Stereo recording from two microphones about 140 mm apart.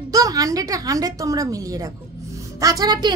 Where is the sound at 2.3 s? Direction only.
25° right (ahead or behind).